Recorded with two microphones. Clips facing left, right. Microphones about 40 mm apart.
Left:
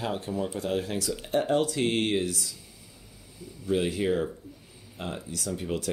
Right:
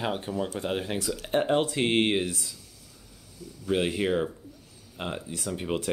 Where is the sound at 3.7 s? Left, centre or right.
Right.